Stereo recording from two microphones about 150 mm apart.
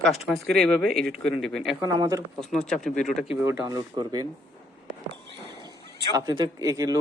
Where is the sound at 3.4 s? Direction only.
15° right (ahead or behind).